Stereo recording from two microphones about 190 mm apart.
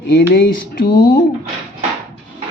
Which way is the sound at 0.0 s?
60° left (ahead or behind).